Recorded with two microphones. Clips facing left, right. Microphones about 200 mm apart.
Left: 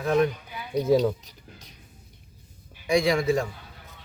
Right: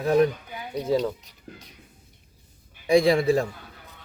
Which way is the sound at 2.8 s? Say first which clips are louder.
Right 4 dB; 30° right (ahead or behind).